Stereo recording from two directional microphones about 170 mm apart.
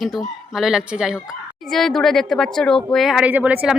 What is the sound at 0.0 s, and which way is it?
Speech, centre (ahead or behind).